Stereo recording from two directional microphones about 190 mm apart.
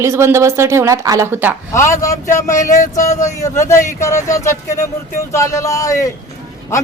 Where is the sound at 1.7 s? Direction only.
15° left (ahead or behind).